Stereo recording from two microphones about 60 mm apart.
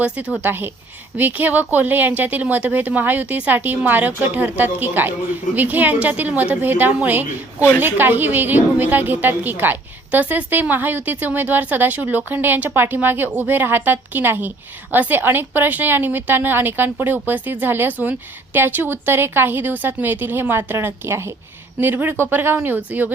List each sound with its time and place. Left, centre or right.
0.0 s a woman's voice: centre
0.4 s a woman's voice: right
21.8 s a woman's voice: right
22.9 s speech: right